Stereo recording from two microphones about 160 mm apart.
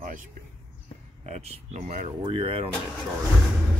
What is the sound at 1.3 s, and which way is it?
Speech, 50° right (ahead or behind).